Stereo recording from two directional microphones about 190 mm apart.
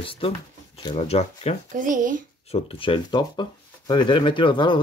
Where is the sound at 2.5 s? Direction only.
30° left (ahead or behind).